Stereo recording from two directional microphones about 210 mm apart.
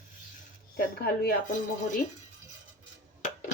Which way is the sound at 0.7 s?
45° left (ahead or behind).